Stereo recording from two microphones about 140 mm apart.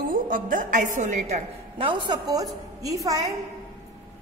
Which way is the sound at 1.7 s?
35° right (ahead or behind).